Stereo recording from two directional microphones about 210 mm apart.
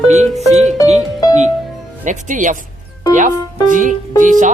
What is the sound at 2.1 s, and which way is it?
Speech, 35° right (ahead or behind).